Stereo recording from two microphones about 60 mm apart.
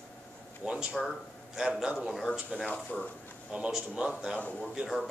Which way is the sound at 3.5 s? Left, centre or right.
Centre.